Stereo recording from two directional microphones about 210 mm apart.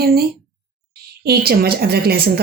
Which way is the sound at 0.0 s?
45° right (ahead or behind).